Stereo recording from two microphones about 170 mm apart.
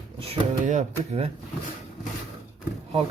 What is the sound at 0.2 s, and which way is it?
Speech, 40° right (ahead or behind).